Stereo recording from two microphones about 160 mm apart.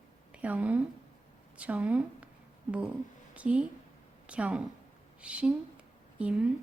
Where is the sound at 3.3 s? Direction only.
5° right (ahead or behind).